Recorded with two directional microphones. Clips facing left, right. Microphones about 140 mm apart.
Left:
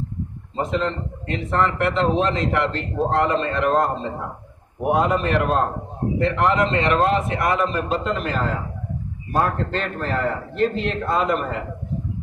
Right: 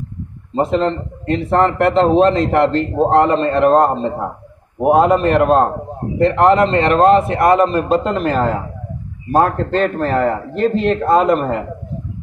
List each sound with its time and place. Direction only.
0.6 s a man's voice: 35° right (ahead or behind)